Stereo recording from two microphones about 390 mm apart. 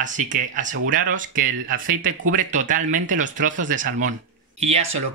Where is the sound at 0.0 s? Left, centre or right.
Centre.